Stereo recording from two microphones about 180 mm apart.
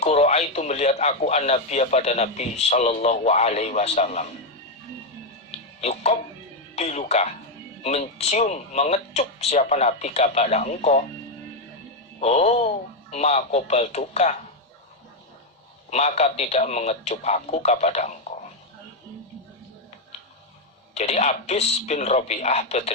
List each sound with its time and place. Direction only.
0.0 s a man's voice: 35° left (ahead or behind)
5.5 s music: 35° left (ahead or behind)
7.8 s a man's voice: 35° left (ahead or behind)
12.2 s a man's voice: 35° left (ahead or behind)
15.9 s a man's voice: 35° left (ahead or behind)
20.9 s a man's voice: 35° left (ahead or behind)